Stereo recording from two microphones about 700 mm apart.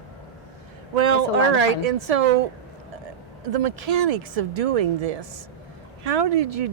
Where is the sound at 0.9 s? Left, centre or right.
Right.